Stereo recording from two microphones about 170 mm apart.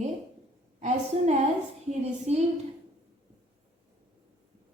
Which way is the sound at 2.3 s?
40° right (ahead or behind).